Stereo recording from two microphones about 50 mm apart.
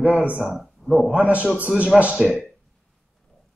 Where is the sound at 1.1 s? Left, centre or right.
Right.